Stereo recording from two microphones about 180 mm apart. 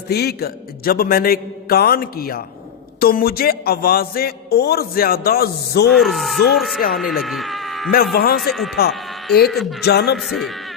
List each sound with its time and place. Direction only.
0.1 s speech: 60° left (ahead or behind)
5.9 s speech: centre (ahead or behind)
8.1 s speech: 60° left (ahead or behind)
8.4 s speech: centre (ahead or behind)
9.8 s speech: 60° left (ahead or behind)
10.2 s speech: centre (ahead or behind)